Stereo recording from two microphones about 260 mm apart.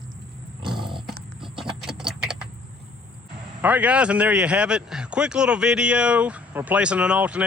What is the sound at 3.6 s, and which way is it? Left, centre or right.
A man's voice, centre.